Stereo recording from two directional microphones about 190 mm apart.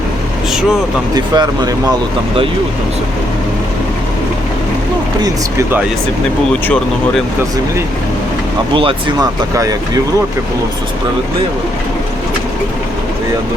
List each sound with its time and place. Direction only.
1.1 s speech: 20° right (ahead or behind)
5.2 s speech: 15° right (ahead or behind)
8.7 s speech: 30° right (ahead or behind)